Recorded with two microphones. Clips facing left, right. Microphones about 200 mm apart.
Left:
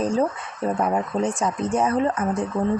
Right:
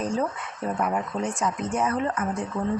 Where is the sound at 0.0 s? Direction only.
30° left (ahead or behind).